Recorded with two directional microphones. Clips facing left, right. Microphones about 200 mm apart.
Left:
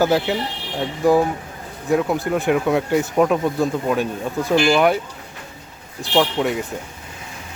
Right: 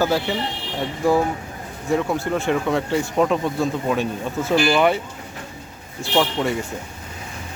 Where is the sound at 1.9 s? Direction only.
5° left (ahead or behind).